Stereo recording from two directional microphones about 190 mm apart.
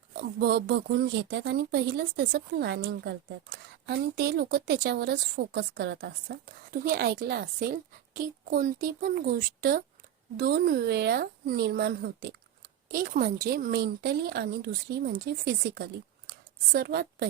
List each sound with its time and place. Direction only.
0.2 s a woman's voice: 55° right (ahead or behind)